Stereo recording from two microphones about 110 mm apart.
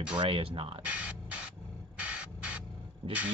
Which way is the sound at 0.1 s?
50° right (ahead or behind).